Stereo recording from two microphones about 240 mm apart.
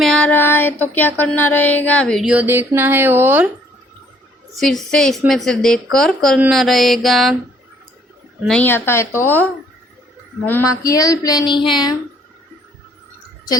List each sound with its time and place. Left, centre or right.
0.0 s a sound: centre
1.2 s a woman's voice: centre
4.5 s a woman's voice: centre
8.4 s speech: centre
10.7 s speech: centre